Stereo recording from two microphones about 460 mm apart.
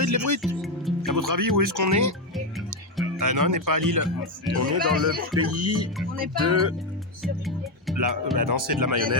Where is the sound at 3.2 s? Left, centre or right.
Right.